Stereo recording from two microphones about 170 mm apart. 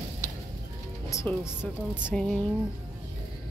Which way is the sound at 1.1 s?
15° left (ahead or behind).